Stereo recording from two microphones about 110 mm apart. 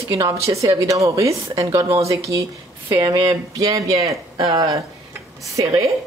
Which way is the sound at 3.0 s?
40° right (ahead or behind).